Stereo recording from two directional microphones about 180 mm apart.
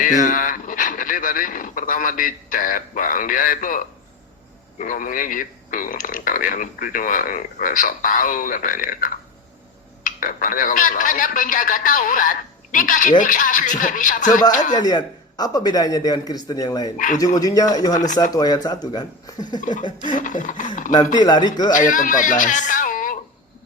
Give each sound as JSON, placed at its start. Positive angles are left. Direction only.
{"t": 0.0, "sound": "a man's voice", "side_deg": 45}
{"t": 14.8, "sound": "speech", "side_deg": 20}
{"t": 20.1, "sound": "a man's voice", "side_deg": 45}
{"t": 20.9, "sound": "speech", "side_deg": 25}
{"t": 21.7, "sound": "a man's voice", "side_deg": 45}